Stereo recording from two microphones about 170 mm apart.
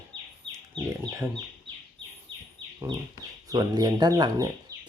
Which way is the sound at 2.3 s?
30° right (ahead or behind).